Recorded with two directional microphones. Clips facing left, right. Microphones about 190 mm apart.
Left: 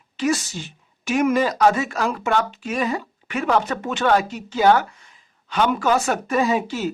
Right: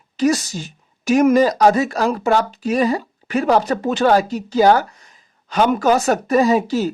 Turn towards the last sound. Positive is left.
turn(degrees=-40)  # may be behind; listen again after turning